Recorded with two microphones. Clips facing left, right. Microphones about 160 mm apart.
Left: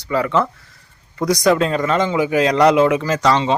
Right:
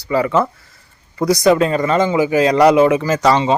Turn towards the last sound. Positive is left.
turn(degrees=-5)  # may be behind; listen again after turning